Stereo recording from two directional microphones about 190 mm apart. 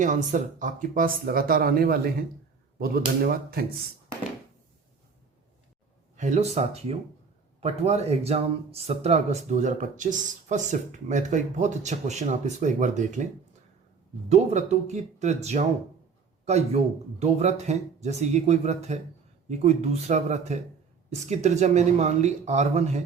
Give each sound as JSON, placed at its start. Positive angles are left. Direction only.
{"t": 0.0, "sound": "speech", "side_deg": -40}
{"t": 6.1, "sound": "speech", "side_deg": -40}
{"t": 14.3, "sound": "speech", "side_deg": -35}